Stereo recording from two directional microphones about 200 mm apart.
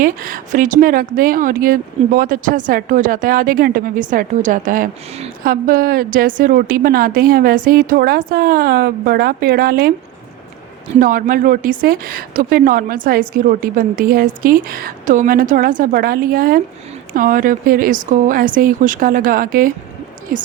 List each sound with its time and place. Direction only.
0.0 s a woman's voice: 45° right (ahead or behind)
11.0 s a woman's voice: 45° right (ahead or behind)